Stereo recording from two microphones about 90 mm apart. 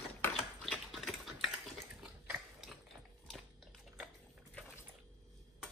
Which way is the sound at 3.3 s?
Centre (ahead or behind).